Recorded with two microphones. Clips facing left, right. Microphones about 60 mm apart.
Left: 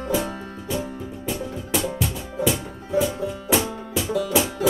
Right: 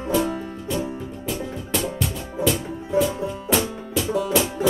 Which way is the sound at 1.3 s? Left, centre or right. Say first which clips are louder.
Left 1 dB; centre.